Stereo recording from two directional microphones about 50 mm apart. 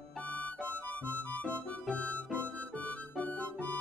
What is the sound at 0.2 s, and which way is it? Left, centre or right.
Harmonica, left.